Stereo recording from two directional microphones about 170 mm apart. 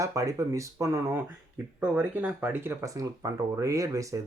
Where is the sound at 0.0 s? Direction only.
20° right (ahead or behind).